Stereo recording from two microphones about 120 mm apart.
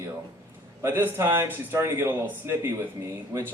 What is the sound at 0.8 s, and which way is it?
Speech, 20° right (ahead or behind).